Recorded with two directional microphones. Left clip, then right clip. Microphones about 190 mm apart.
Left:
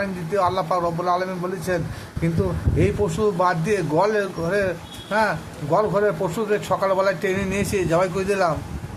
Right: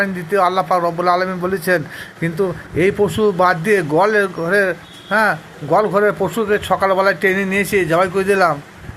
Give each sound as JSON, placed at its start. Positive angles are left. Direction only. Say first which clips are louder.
{"t": 0.0, "sound": "a man's voice", "louder": "right 6 dB", "side_deg": -15}